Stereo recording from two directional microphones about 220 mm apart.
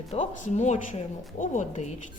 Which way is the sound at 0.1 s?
30° left (ahead or behind).